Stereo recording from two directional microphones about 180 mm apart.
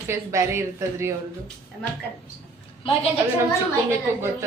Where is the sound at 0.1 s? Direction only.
15° right (ahead or behind).